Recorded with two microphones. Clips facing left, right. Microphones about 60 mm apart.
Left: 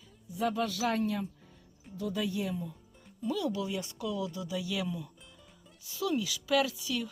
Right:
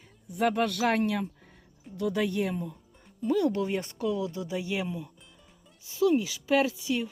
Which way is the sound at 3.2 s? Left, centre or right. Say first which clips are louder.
Right 6 dB; right.